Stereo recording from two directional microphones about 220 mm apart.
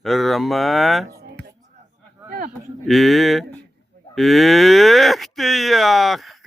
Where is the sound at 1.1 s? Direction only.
45° right (ahead or behind).